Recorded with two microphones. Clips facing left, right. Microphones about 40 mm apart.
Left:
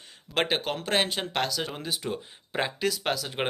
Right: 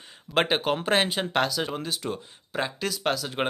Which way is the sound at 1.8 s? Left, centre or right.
Centre.